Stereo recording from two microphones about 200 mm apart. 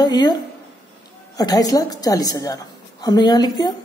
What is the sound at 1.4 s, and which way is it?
A woman's voice, 20° left (ahead or behind).